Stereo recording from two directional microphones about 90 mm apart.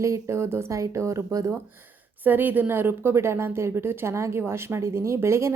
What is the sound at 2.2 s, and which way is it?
A woman's voice, 20° right (ahead or behind).